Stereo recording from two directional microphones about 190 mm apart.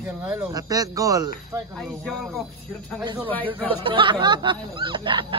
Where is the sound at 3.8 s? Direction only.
25° right (ahead or behind).